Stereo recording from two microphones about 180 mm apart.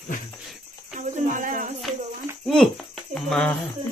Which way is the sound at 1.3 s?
45° right (ahead or behind).